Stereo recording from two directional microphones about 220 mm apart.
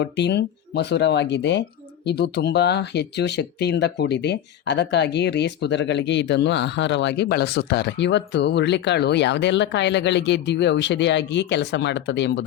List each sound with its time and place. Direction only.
0.0 s speech: 50° left (ahead or behind)